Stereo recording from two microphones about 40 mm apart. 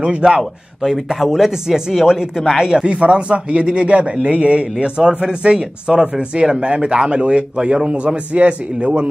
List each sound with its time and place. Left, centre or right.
1.0 s speech: centre; by 9.1 s right